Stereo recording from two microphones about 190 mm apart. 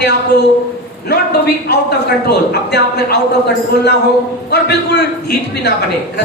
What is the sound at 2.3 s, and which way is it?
Speech, 60° left (ahead or behind).